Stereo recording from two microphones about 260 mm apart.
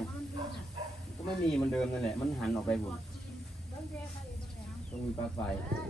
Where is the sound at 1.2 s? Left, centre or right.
Centre.